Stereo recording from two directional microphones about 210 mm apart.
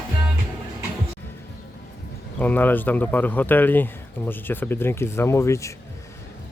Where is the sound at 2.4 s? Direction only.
10° left (ahead or behind).